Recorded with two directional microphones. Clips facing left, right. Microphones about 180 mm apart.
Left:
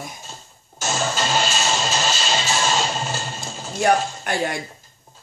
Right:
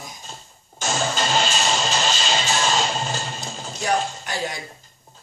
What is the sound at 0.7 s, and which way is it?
Music, 5° left (ahead or behind).